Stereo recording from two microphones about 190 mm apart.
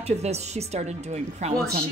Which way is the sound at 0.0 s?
35° right (ahead or behind).